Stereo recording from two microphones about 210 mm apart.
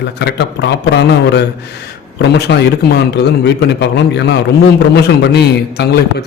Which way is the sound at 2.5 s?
55° left (ahead or behind).